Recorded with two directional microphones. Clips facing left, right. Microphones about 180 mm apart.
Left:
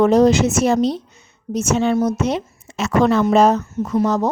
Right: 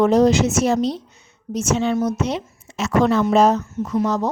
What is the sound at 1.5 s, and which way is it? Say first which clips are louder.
A woman's voice: left 2 dB; 45° left (ahead or behind).